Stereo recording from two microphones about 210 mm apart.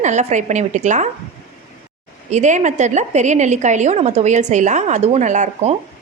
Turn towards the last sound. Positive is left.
turn(degrees=-35)  # may be behind; listen again after turning